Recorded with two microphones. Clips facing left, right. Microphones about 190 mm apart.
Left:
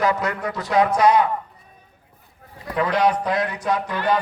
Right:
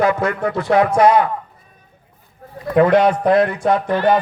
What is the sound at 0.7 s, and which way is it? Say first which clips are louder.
Speech: right 4 dB; 55° right (ahead or behind).